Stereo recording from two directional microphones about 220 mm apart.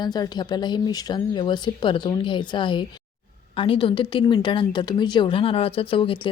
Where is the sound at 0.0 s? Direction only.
20° left (ahead or behind).